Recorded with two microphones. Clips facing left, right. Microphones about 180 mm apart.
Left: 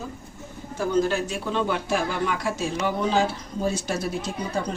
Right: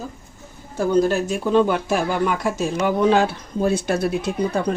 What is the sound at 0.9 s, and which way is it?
Speech, 45° right (ahead or behind).